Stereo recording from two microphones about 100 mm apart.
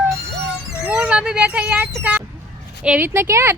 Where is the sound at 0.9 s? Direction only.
10° right (ahead or behind).